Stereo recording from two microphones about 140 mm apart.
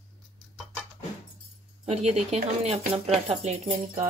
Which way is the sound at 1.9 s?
50° right (ahead or behind).